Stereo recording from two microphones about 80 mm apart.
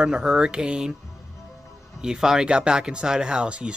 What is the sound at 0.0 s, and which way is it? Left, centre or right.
Speech, centre.